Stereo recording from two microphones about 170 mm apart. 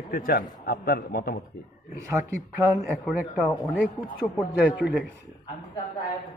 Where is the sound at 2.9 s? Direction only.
Centre (ahead or behind).